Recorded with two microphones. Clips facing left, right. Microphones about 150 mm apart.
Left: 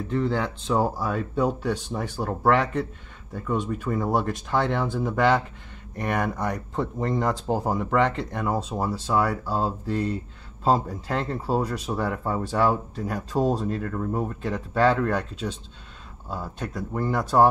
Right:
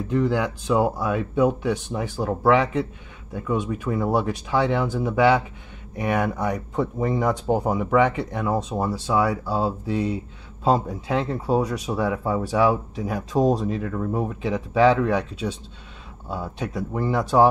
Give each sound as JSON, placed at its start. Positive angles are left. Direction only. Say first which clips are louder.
{"t": 0.1, "sound": "a man's voice", "louder": "right 3 dB", "side_deg": -15}